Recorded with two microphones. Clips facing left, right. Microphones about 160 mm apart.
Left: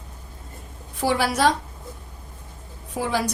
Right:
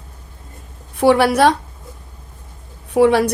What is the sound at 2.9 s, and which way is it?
Speech, 70° right (ahead or behind).